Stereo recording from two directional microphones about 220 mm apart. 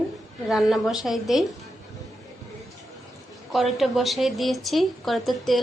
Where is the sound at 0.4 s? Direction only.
Centre (ahead or behind).